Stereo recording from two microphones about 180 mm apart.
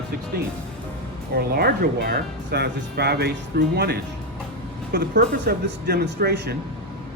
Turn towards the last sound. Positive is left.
turn(degrees=-60)  # may be behind; listen again after turning